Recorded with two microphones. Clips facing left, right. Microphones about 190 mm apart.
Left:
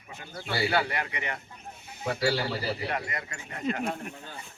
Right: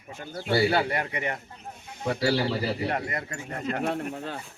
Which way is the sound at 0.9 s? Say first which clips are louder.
Right 4 dB; 45° right (ahead or behind).